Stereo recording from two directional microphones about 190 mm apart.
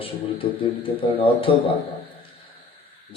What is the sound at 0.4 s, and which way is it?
A man's voice, 30° left (ahead or behind).